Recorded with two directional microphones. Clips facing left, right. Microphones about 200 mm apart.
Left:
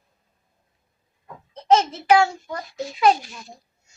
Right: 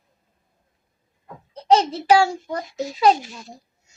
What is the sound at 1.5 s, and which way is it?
A child's voice, 35° right (ahead or behind).